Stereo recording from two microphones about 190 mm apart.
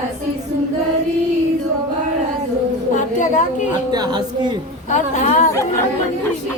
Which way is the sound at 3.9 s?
20° right (ahead or behind).